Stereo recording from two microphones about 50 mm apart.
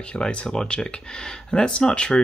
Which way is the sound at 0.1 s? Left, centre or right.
Left.